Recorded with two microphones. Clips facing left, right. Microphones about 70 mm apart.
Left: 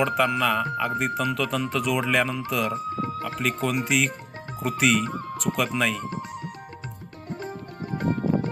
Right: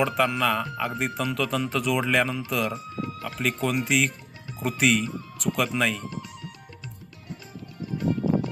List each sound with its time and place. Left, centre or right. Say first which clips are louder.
0.0 s speech: left 1 dB; centre
2.7 s music: left 5 dB; left
3.3 s speech: right 1 dB; centre
5.0 s speech: left 4 dB; left
5.4 s speech: even; centre
6.1 s music: left 4 dB; left
7.8 s music: even; left